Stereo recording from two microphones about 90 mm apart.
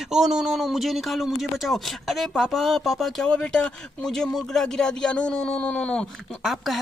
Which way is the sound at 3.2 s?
10° left (ahead or behind).